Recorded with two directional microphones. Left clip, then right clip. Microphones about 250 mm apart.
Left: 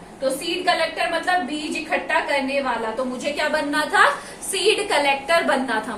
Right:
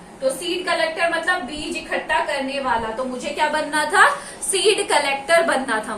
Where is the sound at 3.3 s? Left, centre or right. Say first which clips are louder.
Right 2 dB; centre.